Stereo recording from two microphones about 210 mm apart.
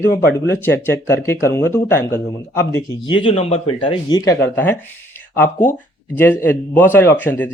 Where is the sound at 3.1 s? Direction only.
25° left (ahead or behind).